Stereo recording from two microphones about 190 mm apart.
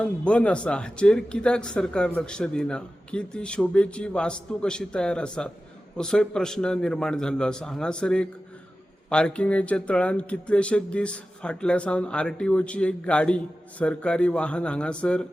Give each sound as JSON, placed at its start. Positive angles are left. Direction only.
{"t": 0.0, "sound": "speech", "side_deg": 5}